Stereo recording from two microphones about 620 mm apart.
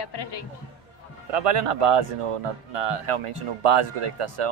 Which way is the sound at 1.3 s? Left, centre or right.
Right.